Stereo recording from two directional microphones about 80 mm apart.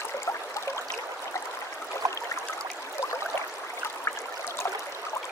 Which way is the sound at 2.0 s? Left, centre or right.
Right.